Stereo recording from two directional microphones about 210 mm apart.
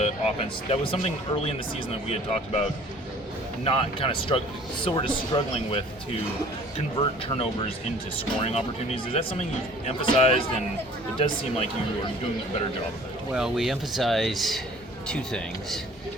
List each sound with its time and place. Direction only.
0.0 s speech: 25° left (ahead or behind)
13.3 s speech: centre (ahead or behind)